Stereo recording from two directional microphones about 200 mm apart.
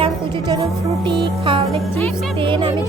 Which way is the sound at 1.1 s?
25° right (ahead or behind).